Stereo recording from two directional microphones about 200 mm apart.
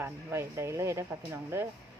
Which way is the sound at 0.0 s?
10° right (ahead or behind).